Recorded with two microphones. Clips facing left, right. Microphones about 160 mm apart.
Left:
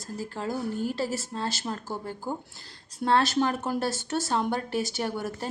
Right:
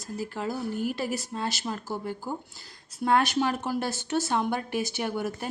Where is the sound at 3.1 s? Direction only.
15° right (ahead or behind).